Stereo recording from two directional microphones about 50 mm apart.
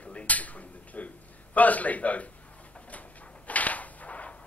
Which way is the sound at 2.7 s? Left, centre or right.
Left.